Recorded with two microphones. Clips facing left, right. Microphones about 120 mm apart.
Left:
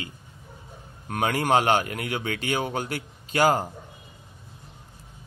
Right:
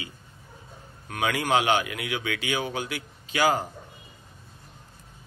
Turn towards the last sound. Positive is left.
turn(degrees=45)  # may be behind; listen again after turning